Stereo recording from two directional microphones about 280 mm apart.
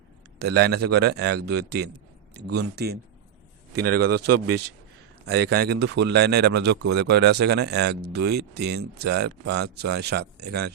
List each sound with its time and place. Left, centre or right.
0.3 s speech: right
3.8 s speech: right
5.5 s speech: right